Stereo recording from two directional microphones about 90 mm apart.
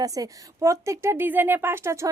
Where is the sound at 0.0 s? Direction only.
40° right (ahead or behind).